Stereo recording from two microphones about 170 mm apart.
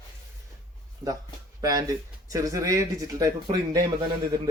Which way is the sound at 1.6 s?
20° right (ahead or behind).